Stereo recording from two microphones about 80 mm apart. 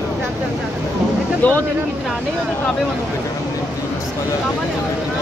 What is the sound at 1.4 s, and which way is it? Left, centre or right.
Speech, left.